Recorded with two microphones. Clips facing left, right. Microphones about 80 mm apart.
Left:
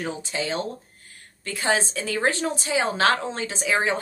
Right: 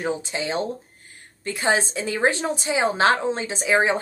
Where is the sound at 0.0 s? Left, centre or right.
Right.